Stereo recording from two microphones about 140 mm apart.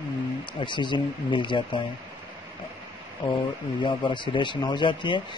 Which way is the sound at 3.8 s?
35° left (ahead or behind).